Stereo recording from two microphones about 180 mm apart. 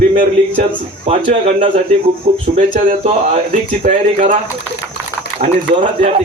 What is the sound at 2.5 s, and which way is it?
Speech, 50° right (ahead or behind).